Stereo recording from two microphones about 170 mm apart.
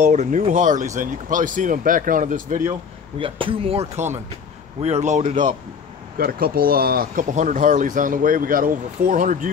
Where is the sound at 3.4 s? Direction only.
35° right (ahead or behind).